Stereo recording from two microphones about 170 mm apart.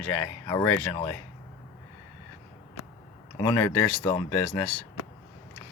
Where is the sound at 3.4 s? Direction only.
25° left (ahead or behind).